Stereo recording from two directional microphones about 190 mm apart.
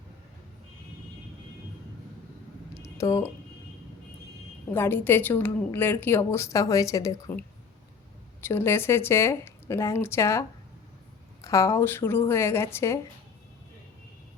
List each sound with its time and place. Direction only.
2.7 s a sound: 15° left (ahead or behind)
4.7 s a woman's voice: 10° left (ahead or behind)
11.4 s a woman's voice: 15° left (ahead or behind)